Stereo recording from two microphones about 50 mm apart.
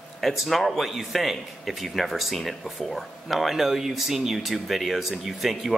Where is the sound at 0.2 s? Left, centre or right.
Centre.